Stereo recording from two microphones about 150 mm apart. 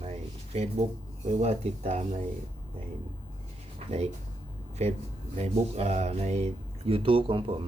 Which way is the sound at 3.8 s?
40° right (ahead or behind).